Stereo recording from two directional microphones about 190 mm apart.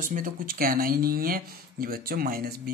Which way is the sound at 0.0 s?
45° right (ahead or behind).